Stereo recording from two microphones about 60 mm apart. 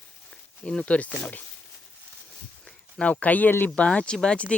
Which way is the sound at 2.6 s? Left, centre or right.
Left.